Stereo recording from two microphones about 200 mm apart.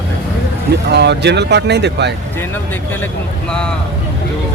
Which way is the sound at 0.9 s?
55° right (ahead or behind).